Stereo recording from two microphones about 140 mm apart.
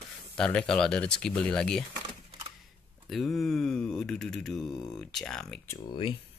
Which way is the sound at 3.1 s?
Centre (ahead or behind).